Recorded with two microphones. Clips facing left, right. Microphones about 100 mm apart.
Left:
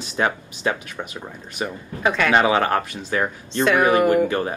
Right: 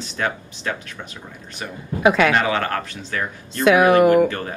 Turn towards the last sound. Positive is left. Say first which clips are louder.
# left 1 dB
turn(degrees=20)  # may be behind; listen again after turning